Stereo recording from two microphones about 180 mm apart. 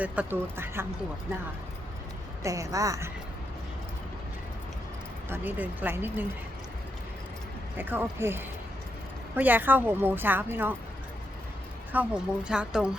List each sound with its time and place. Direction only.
0.0 s a woman's voice: 10° right (ahead or behind)
2.4 s speech: 20° right (ahead or behind)
5.3 s a woman's voice: 10° right (ahead or behind)
7.8 s a woman's voice: 10° right (ahead or behind)
11.9 s a woman's voice: 5° right (ahead or behind)